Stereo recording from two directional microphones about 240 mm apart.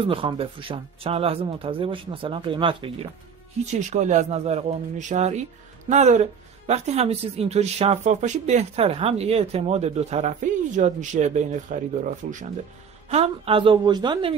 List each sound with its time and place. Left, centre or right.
0.0 s speech: right